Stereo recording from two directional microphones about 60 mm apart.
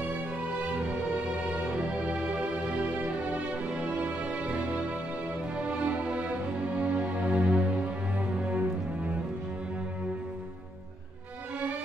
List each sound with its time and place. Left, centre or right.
1.5 s music: centre